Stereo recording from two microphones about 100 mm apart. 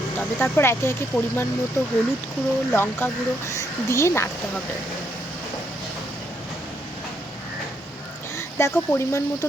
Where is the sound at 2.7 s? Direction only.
20° left (ahead or behind).